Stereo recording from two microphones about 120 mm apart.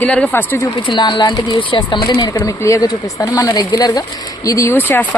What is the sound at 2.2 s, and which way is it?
Speech, 30° left (ahead or behind).